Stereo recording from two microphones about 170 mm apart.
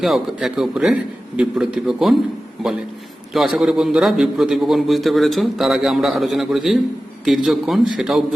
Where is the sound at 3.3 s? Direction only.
Centre (ahead or behind).